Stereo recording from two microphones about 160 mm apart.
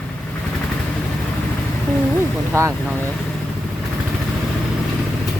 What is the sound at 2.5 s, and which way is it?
Speech, 20° right (ahead or behind).